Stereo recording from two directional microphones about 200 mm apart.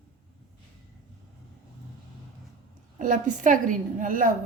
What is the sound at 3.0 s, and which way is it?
A woman's voice, 40° right (ahead or behind).